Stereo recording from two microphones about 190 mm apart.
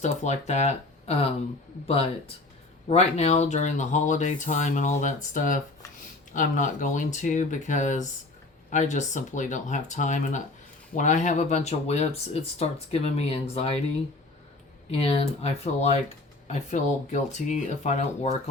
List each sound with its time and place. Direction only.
0.0 s speech: 35° left (ahead or behind)
14.8 s speech: 30° left (ahead or behind)